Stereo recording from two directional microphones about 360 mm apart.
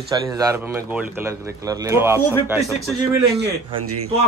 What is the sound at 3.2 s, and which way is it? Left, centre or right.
Speech, right.